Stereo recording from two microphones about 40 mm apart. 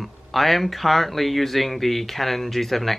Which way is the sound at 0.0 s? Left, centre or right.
Centre.